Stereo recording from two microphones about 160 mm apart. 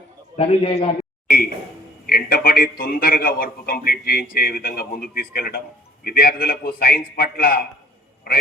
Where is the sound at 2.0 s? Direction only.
70° left (ahead or behind).